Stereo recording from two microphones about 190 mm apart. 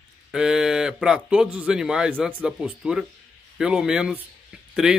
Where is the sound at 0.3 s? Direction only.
5° right (ahead or behind).